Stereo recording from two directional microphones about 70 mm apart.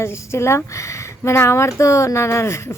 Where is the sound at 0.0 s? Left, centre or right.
Left.